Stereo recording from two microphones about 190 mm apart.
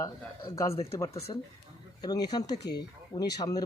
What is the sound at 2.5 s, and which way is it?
Speech, 60° left (ahead or behind).